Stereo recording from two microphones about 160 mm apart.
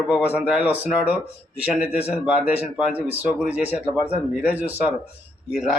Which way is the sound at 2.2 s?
5° right (ahead or behind).